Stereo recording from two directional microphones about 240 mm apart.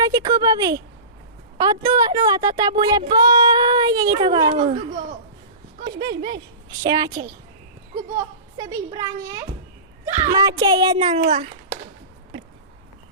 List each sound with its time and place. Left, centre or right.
0.0 s a woman's voice: centre
5.8 s a woman's voice: centre
8.1 s a woman's voice: centre; by 11.5 s right